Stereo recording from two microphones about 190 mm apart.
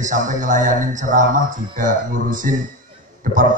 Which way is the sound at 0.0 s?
40° right (ahead or behind).